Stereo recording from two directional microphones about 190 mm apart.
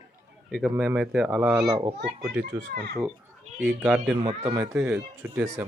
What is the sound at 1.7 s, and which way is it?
Speech, 30° right (ahead or behind).